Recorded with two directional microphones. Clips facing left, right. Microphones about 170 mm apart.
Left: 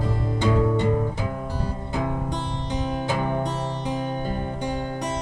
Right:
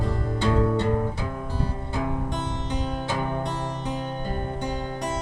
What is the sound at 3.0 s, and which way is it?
Music, 15° left (ahead or behind).